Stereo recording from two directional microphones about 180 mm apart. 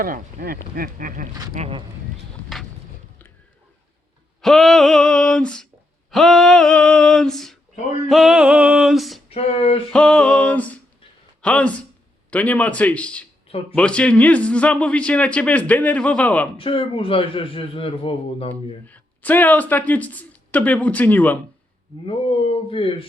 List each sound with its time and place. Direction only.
0.0 s speech: 50° right (ahead or behind)
1.5 s speech: 35° right (ahead or behind)
4.4 s a sound: centre (ahead or behind)
9.3 s a man's voice: 35° left (ahead or behind)
9.9 s a man's voice: 5° left (ahead or behind)
16.6 s a man's voice: 30° left (ahead or behind)
18.9 s speech: 10° left (ahead or behind)
22.0 s speech: 30° left (ahead or behind)